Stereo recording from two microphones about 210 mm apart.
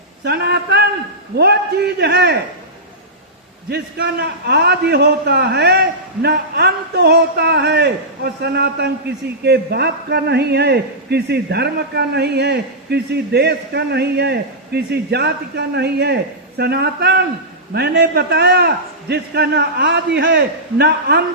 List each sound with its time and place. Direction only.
0.3 s speech: 50° right (ahead or behind)
3.7 s speech: 50° right (ahead or behind)